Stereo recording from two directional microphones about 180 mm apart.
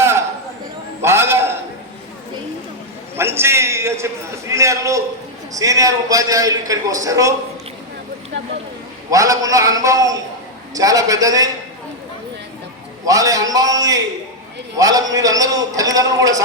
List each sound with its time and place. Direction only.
1.0 s a sound: 15° right (ahead or behind)
3.2 s a man's voice: 15° right (ahead or behind)
9.0 s a man's voice: 20° right (ahead or behind)
13.1 s a man's voice: 20° right (ahead or behind)